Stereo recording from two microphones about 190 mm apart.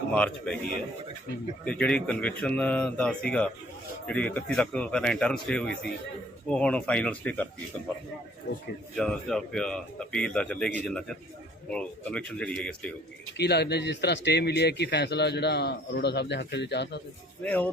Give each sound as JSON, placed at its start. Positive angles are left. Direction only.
{"t": 0.1, "sound": "speech", "side_deg": 5}
{"t": 1.6, "sound": "speech", "side_deg": 5}
{"t": 9.0, "sound": "speech", "side_deg": 5}
{"t": 13.3, "sound": "speech", "side_deg": 60}
{"t": 17.4, "sound": "speech", "side_deg": 10}